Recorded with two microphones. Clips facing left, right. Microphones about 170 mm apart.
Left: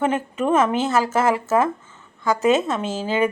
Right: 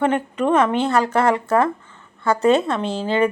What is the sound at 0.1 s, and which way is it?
Speech, 5° left (ahead or behind).